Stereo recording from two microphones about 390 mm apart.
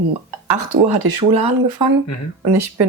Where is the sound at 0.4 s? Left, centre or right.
Right.